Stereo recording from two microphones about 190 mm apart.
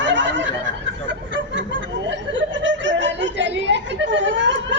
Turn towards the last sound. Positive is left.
turn(degrees=-75)  # may be behind; listen again after turning